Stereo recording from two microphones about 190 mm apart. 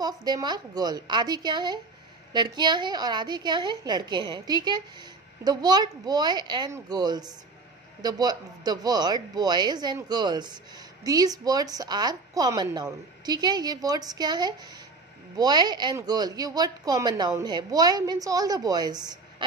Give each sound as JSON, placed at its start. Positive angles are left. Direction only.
{"t": 0.0, "sound": "speech", "side_deg": -20}